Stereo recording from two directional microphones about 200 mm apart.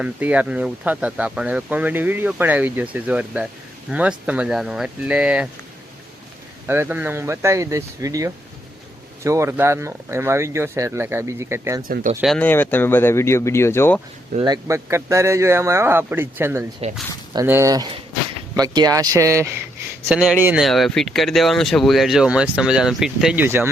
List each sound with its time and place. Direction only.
0.0 s speech: 5° right (ahead or behind)
6.7 s speech: 10° right (ahead or behind)
12.2 s speech: 5° left (ahead or behind)
14.3 s speech: 20° right (ahead or behind)